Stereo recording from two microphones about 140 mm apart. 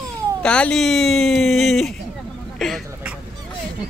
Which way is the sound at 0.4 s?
5° left (ahead or behind).